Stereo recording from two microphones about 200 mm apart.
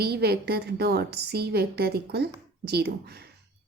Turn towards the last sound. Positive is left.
turn(degrees=-55)  # may be behind; listen again after turning